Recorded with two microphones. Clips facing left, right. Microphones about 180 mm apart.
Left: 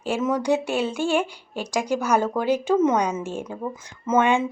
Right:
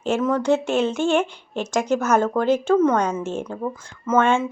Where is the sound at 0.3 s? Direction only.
15° left (ahead or behind).